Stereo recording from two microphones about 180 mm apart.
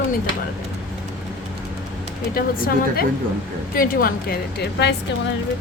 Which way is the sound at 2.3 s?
55° left (ahead or behind).